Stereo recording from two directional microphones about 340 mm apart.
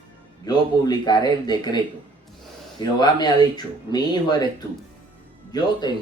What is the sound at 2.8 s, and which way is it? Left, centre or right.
Speech, centre.